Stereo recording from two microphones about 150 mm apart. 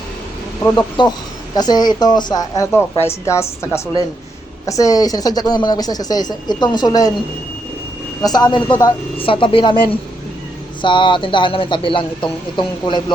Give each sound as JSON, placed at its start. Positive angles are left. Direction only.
{"t": 0.6, "sound": "a woman's voice", "side_deg": 25}
{"t": 8.2, "sound": "speech", "side_deg": 25}
{"t": 10.8, "sound": "speech", "side_deg": 35}